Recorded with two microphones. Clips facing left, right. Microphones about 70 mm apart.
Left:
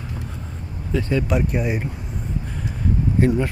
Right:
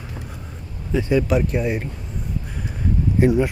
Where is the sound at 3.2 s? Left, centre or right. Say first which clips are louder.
Right 3 dB; centre.